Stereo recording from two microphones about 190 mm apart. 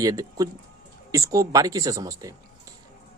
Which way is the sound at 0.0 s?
20° right (ahead or behind).